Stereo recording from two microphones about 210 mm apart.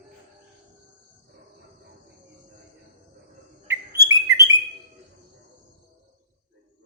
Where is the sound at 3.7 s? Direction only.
15° right (ahead or behind).